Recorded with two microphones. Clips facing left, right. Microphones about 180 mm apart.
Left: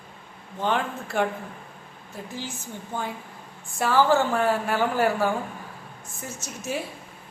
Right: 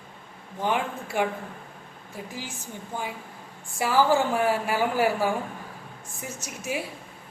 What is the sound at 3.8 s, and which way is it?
A man's voice, 10° right (ahead or behind).